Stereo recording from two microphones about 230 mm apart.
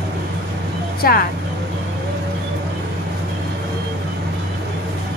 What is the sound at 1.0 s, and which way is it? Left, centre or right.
Speech, left.